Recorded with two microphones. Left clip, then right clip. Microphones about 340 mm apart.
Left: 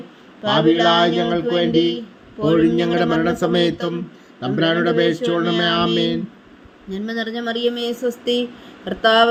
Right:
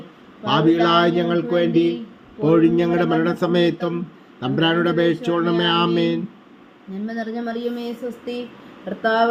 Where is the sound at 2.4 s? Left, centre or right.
Centre.